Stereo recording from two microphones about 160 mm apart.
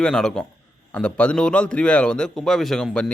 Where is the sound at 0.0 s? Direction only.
5° left (ahead or behind).